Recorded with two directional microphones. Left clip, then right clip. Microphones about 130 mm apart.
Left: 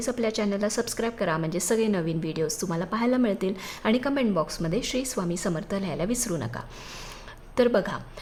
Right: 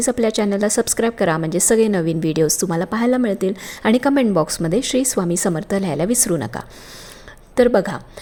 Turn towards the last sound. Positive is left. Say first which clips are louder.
# right 8 dB
turn(degrees=-40)  # may be behind; listen again after turning